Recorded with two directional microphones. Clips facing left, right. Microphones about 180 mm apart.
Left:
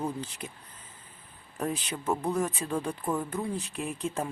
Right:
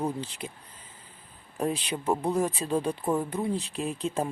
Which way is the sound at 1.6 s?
30° right (ahead or behind).